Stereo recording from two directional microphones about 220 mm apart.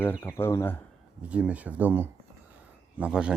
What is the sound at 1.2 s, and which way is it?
Speech, 5° right (ahead or behind).